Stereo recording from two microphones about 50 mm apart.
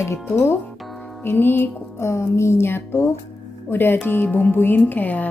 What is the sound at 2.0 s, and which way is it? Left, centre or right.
Speech, left.